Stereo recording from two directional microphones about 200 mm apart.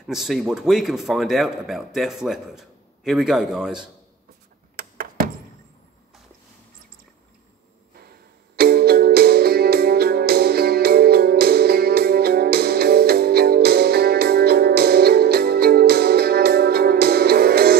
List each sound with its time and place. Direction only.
0.0 s speech: centre (ahead or behind)
4.7 s a sound: 45° right (ahead or behind)
8.5 s music: 50° right (ahead or behind)